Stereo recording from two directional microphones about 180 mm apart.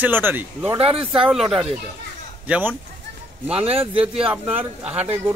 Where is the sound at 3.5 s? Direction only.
35° right (ahead or behind).